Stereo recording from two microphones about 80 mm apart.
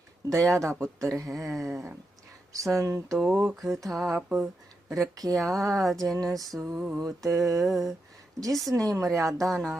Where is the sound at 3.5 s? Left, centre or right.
Centre.